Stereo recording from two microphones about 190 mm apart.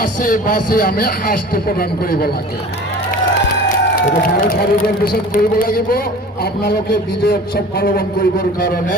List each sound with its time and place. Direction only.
0.0 s speech: 45° left (ahead or behind)
4.6 s speech: 50° left (ahead or behind)